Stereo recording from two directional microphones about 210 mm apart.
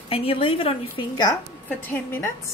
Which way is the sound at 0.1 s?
25° left (ahead or behind).